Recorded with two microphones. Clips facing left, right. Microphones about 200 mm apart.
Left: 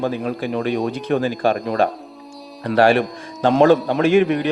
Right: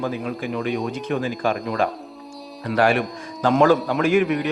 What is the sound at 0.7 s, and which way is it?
Speech, 40° left (ahead or behind).